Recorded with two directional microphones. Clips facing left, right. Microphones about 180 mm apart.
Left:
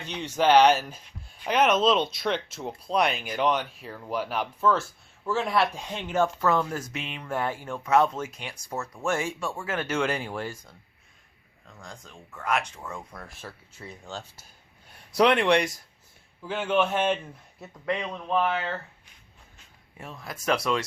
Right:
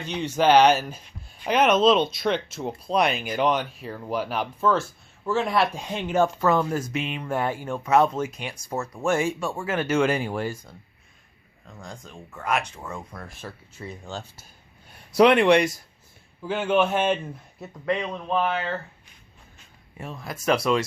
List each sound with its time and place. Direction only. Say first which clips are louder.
0.1 s speech: right 2 dB; 5° right (ahead or behind)
5.7 s speech: right 3 dB; 10° right (ahead or behind)
8.7 s speech: right 4 dB; 25° right (ahead or behind)
9.0 s speech: right 5 dB; 15° right (ahead or behind)
11.8 s speech: right 4 dB; 15° right (ahead or behind)
13.1 s speech: right 3 dB; 5° left (ahead or behind)
20.0 s speech: right 4 dB; 5° right (ahead or behind)